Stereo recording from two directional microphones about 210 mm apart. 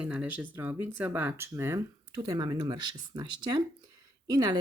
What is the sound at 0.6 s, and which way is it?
Speech, 10° right (ahead or behind).